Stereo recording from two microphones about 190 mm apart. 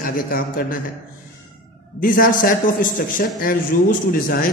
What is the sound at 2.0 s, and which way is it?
A man's voice, 45° left (ahead or behind).